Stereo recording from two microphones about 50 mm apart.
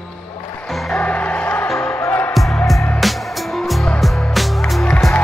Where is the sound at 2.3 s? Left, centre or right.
Centre.